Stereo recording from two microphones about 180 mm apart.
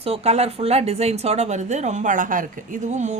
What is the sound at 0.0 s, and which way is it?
Speech, 35° right (ahead or behind).